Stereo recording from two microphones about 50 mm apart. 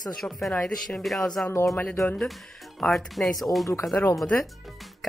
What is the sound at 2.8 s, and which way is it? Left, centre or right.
Speech, centre.